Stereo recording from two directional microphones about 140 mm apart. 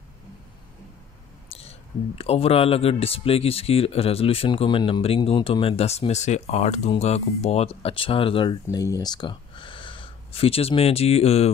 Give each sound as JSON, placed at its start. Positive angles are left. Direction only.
{"t": 1.5, "sound": "speech", "side_deg": 45}
{"t": 8.6, "sound": "speech", "side_deg": 25}